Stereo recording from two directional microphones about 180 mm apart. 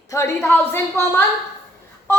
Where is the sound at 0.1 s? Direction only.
15° left (ahead or behind).